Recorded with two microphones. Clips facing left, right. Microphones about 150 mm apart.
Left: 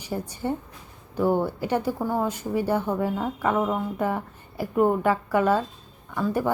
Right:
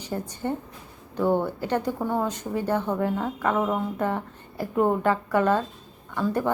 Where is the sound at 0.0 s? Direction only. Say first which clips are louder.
Even; 10° left (ahead or behind).